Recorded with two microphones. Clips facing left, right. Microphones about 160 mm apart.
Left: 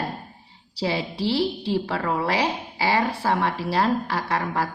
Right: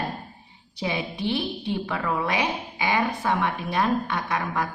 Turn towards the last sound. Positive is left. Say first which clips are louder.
# left 2 dB
turn(degrees=30)  # may be behind; listen again after turning